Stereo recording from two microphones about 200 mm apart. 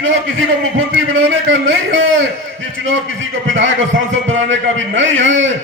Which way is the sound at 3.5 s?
70° right (ahead or behind).